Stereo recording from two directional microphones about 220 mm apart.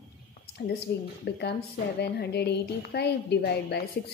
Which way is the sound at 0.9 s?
50° left (ahead or behind).